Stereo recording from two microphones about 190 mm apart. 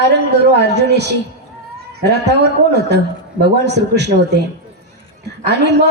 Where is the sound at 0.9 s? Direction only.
60° right (ahead or behind).